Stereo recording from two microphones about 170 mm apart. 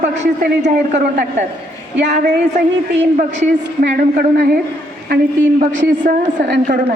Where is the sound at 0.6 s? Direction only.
50° right (ahead or behind).